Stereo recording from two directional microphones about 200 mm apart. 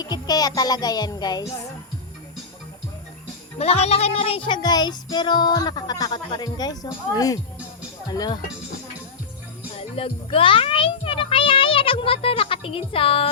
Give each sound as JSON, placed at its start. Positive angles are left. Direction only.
{"t": 0.0, "sound": "music", "side_deg": 20}
{"t": 3.6, "sound": "music", "side_deg": 30}
{"t": 9.7, "sound": "a child's voice", "side_deg": 25}